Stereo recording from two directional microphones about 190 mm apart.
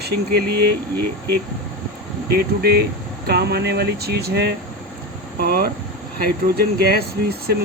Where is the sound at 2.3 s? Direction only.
55° right (ahead or behind).